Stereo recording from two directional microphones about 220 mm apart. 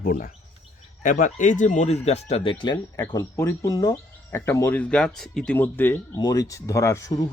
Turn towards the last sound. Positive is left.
turn(degrees=15)  # may be behind; listen again after turning